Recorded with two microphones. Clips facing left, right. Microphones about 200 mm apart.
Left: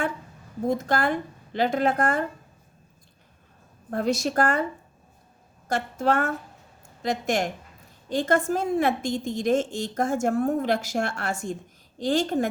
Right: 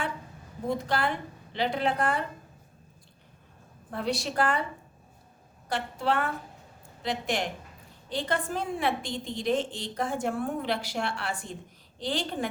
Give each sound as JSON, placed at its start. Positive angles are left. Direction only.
{"t": 0.7, "sound": "a woman's voice", "side_deg": 45}
{"t": 3.9, "sound": "a woman's voice", "side_deg": 45}
{"t": 5.6, "sound": "a woman's voice", "side_deg": 45}